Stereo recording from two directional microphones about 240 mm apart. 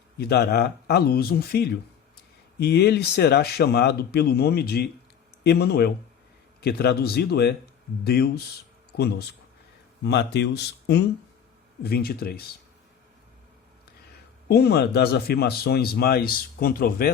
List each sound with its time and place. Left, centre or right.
0.2 s speech: left
14.4 s speech: left